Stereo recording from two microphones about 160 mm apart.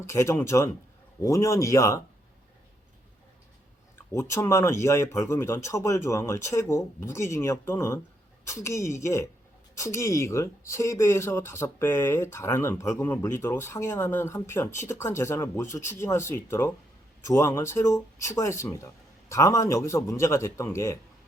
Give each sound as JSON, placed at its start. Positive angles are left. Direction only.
{"t": 0.0, "sound": "speech", "side_deg": 20}
{"t": 3.9, "sound": "speech", "side_deg": 20}